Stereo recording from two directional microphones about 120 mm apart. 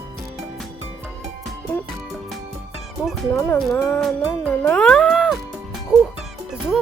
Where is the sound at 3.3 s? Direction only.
20° left (ahead or behind).